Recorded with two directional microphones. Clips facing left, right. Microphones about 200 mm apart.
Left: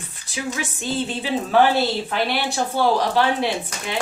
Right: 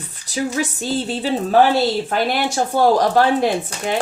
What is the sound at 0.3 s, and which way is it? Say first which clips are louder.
A woman's voice: right 6 dB; 40° right (ahead or behind).